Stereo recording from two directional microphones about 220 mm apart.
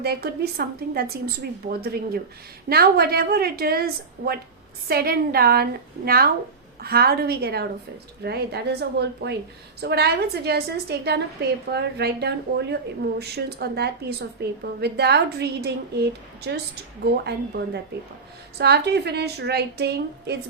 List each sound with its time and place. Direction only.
0.0 s a woman's voice: 45° right (ahead or behind)
4.9 s a woman's voice: 45° right (ahead or behind)